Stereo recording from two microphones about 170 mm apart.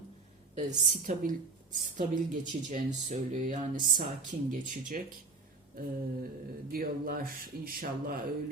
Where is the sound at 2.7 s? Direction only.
45° right (ahead or behind).